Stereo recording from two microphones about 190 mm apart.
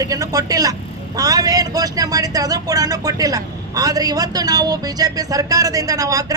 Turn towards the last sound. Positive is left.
turn(degrees=-20)  # may be behind; listen again after turning